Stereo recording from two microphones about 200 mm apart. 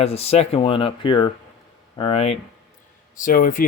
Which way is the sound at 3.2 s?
45° left (ahead or behind).